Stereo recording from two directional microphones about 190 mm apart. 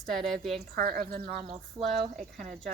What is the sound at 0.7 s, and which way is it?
Speech, 50° right (ahead or behind).